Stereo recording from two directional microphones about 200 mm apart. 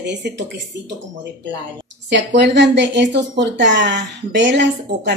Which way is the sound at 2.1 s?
60° right (ahead or behind).